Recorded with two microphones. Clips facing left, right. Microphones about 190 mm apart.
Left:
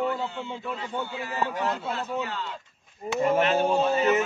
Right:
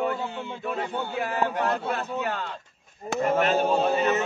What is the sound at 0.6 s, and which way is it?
A man's voice, 60° right (ahead or behind).